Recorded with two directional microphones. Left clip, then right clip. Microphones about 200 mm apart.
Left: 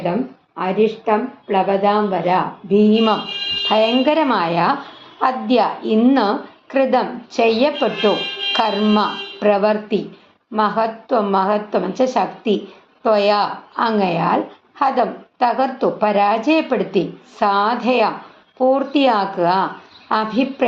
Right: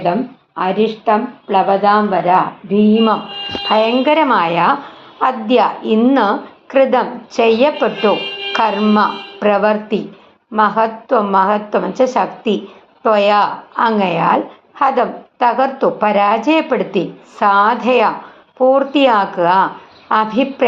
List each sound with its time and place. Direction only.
0.0 s a woman's voice: 30° right (ahead or behind); by 20.7 s 15° right (ahead or behind)